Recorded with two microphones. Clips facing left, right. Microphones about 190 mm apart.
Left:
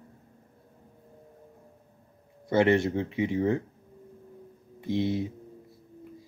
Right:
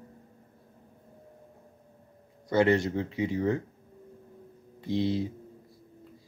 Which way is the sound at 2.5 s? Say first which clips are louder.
Left 1 dB; 25° left (ahead or behind).